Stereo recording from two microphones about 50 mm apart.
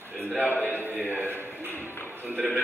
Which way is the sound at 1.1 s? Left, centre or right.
Right.